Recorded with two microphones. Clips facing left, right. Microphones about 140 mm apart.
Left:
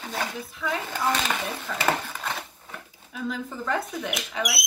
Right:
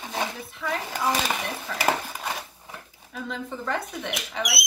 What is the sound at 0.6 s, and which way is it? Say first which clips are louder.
Speech: even; 10° right (ahead or behind).